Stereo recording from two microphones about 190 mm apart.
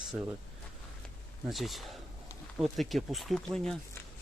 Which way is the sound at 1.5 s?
Centre (ahead or behind).